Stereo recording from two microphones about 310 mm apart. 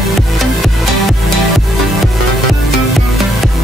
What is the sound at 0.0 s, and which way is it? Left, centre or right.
Music, centre.